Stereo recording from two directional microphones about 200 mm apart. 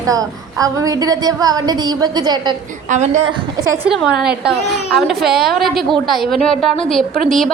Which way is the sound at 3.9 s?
Centre (ahead or behind).